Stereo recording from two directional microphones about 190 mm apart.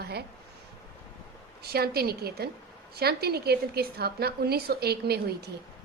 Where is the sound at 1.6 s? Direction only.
55° right (ahead or behind).